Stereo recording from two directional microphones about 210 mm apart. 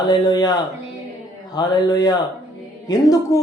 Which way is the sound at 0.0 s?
20° left (ahead or behind).